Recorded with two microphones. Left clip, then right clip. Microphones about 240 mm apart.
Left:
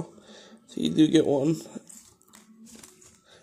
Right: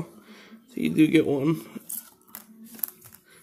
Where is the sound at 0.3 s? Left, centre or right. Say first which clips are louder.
Left 1 dB; centre.